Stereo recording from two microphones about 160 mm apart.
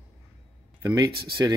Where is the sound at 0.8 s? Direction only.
20° right (ahead or behind).